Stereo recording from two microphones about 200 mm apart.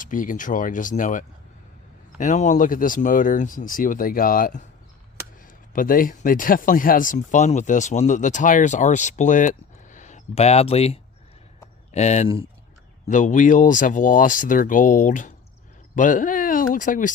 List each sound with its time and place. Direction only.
0.0 s speech: 40° left (ahead or behind)
5.7 s speech: 45° left (ahead or behind)